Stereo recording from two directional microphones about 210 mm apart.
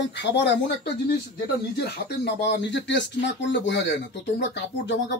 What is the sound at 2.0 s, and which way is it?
Speech, 55° left (ahead or behind).